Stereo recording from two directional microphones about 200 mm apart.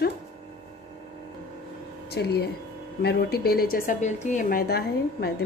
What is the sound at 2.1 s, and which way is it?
Speech, 55° left (ahead or behind).